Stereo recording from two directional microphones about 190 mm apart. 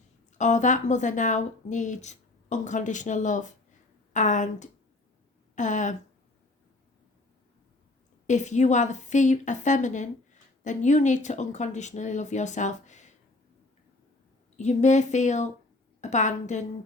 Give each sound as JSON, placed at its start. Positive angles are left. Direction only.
{"t": 0.3, "sound": "speech", "side_deg": 40}
{"t": 8.3, "sound": "speech", "side_deg": 40}
{"t": 14.5, "sound": "speech", "side_deg": 40}